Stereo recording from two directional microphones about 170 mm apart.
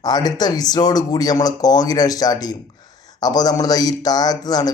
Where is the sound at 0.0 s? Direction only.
25° left (ahead or behind).